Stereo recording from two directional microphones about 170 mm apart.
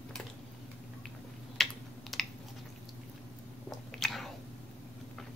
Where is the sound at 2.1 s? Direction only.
Centre (ahead or behind).